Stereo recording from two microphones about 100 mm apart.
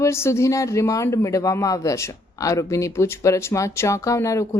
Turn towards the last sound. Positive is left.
turn(degrees=35)  # may be behind; listen again after turning